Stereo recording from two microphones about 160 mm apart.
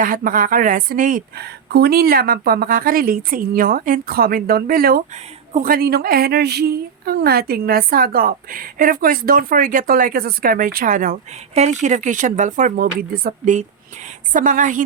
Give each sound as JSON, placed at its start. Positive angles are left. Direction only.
{"t": 0.0, "sound": "a woman's voice", "side_deg": -60}